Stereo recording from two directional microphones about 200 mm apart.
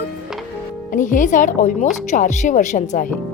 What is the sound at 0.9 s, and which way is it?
A woman's voice, 40° left (ahead or behind).